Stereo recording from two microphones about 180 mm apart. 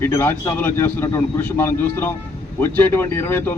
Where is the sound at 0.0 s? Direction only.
10° left (ahead or behind).